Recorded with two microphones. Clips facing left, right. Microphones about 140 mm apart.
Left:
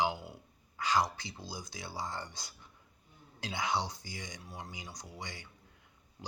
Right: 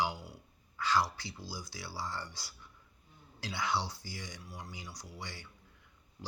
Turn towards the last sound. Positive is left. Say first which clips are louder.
# left 1 dB
turn(degrees=20)  # may be behind; listen again after turning